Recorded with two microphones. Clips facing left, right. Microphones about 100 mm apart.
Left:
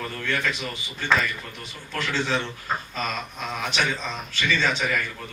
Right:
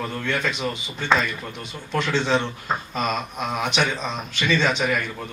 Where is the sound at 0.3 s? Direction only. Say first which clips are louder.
Right 2 dB; 20° right (ahead or behind).